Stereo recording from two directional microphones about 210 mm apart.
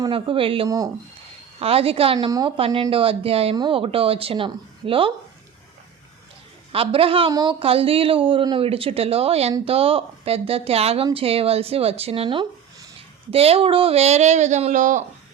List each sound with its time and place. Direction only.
0.0 s speech: 25° right (ahead or behind)
6.7 s speech: 25° right (ahead or behind)